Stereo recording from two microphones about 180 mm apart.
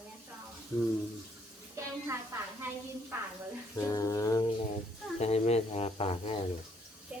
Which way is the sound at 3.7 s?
20° left (ahead or behind).